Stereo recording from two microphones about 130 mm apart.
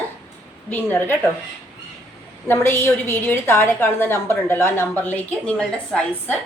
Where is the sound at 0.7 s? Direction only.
15° left (ahead or behind).